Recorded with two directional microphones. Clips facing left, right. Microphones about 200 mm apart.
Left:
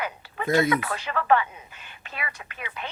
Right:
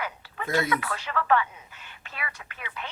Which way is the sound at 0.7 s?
20° left (ahead or behind).